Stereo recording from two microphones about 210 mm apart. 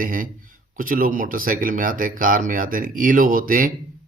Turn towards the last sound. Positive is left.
turn(degrees=-40)  # may be behind; listen again after turning